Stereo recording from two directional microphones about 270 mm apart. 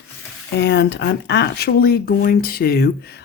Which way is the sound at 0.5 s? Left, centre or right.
Left.